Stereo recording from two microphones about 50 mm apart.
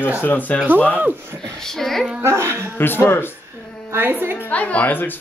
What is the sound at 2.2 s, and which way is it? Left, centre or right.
Speech, right.